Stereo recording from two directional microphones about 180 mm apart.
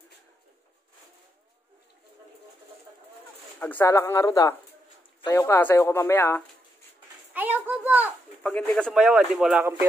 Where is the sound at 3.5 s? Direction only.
10° left (ahead or behind).